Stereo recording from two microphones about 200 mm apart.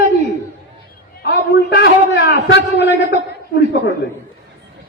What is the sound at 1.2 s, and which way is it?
A man's voice, 60° left (ahead or behind).